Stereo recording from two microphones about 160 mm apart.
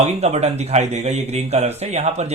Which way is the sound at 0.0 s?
45° right (ahead or behind).